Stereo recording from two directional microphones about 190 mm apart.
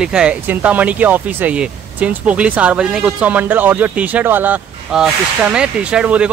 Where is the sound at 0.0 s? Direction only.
5° right (ahead or behind).